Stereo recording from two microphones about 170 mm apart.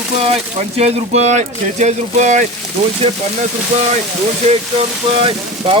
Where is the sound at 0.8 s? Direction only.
40° right (ahead or behind).